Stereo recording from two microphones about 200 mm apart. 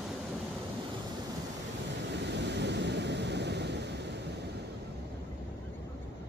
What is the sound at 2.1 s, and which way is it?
Waves, 60° right (ahead or behind).